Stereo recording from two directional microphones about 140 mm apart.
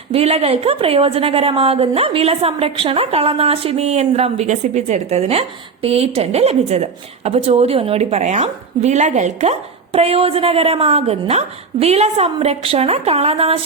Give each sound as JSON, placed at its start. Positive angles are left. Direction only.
{"t": 0.1, "sound": "a woman's voice", "side_deg": -45}
{"t": 9.9, "sound": "a woman's voice", "side_deg": -45}